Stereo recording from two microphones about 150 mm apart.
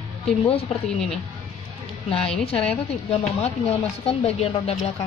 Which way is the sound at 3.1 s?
45° left (ahead or behind).